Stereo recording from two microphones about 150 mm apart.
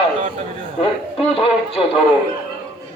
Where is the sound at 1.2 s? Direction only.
40° left (ahead or behind).